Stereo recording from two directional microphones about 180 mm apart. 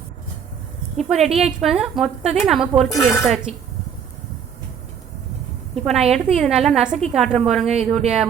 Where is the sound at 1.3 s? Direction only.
Centre (ahead or behind).